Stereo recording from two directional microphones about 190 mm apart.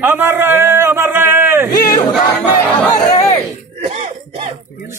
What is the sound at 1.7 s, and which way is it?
Crowd, 20° left (ahead or behind).